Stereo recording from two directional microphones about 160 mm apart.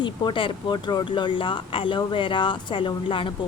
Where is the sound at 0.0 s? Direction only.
30° left (ahead or behind).